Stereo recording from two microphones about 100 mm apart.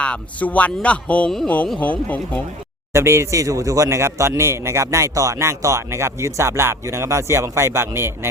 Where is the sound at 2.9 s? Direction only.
30° right (ahead or behind).